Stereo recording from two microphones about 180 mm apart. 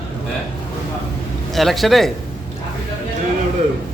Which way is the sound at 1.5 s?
Centre (ahead or behind).